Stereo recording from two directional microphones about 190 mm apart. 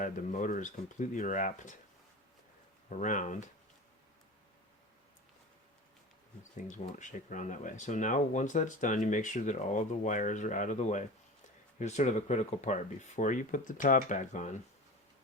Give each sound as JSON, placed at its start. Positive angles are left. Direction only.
{"t": 0.0, "sound": "speech", "side_deg": 40}
{"t": 2.9, "sound": "speech", "side_deg": 40}
{"t": 6.7, "sound": "speech", "side_deg": 40}